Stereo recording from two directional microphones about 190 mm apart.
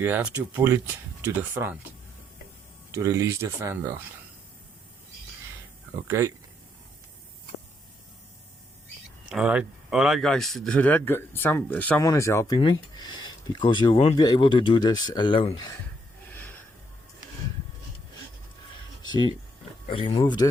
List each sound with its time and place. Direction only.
0.0 s speech: 10° right (ahead or behind)
2.9 s speech: 15° right (ahead or behind)
6.1 s speech: 15° right (ahead or behind)
9.3 s speech: 5° right (ahead or behind); by 15.7 s 25° left (ahead or behind)
16.3 s snort: 10° left (ahead or behind)
19.0 s a sound: 20° left (ahead or behind)
19.9 s speech: 30° left (ahead or behind)